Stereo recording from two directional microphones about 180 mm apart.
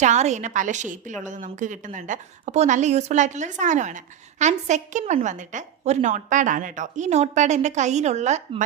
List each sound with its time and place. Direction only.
0.0 s a woman's voice: 40° right (ahead or behind)